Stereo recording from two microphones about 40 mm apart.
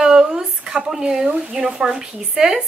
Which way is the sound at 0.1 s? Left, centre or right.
Centre.